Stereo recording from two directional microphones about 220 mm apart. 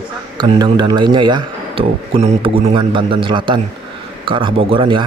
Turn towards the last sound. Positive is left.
turn(degrees=-20)  # may be behind; listen again after turning